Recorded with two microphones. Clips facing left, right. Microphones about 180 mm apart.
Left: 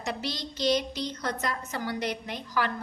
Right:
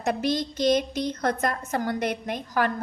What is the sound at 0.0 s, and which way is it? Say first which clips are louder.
A woman's voice: right 8 dB; 50° right (ahead or behind).